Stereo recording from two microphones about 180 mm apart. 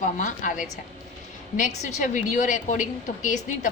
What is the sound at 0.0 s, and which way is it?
Speech, 45° left (ahead or behind).